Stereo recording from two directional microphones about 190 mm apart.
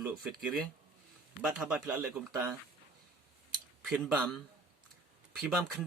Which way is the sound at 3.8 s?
Centre (ahead or behind).